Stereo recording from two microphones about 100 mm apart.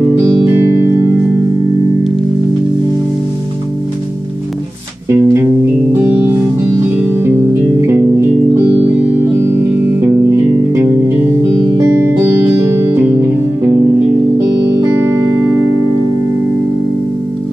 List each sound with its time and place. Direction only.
0.5 s music: 25° right (ahead or behind)
5.1 s music: 25° right (ahead or behind)
7.8 s music: 25° right (ahead or behind)
11.6 s music: 50° right (ahead or behind)